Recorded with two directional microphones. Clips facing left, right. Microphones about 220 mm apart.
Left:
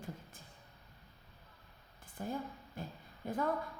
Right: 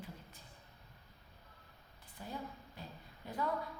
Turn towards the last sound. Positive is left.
turn(degrees=50)  # may be behind; listen again after turning